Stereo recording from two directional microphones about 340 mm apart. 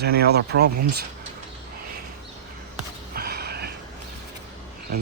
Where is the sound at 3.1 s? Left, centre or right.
Right.